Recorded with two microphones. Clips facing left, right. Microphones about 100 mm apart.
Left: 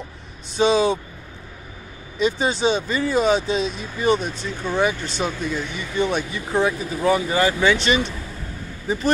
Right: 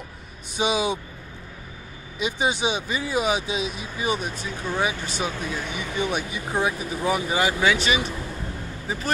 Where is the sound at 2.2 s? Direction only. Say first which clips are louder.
Left 4 dB; 15° right (ahead or behind).